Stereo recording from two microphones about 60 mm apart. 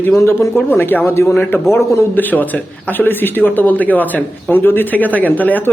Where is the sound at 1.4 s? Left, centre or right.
Left.